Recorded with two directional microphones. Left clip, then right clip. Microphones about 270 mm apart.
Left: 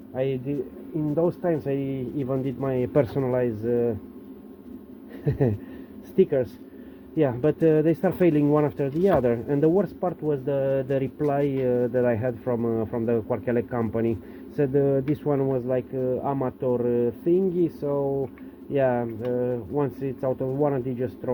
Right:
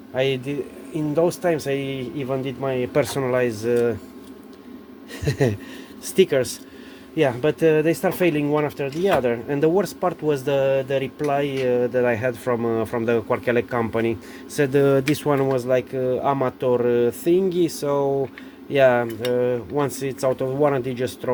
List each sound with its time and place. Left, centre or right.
0.1 s speech: centre
5.2 s speech: centre